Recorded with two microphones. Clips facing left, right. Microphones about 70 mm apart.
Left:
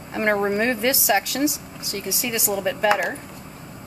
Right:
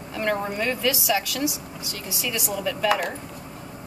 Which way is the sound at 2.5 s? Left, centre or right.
Left.